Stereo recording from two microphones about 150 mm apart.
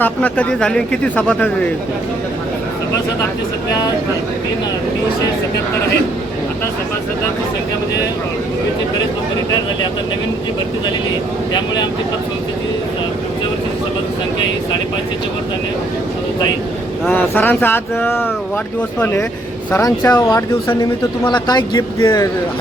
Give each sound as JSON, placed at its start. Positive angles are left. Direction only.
{"t": 0.0, "sound": "speech", "side_deg": 10}
{"t": 17.1, "sound": "a man's voice", "side_deg": 10}
{"t": 21.2, "sound": "a man's voice", "side_deg": 30}